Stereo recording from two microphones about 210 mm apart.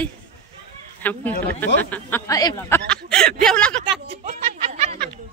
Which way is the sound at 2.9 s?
5° left (ahead or behind).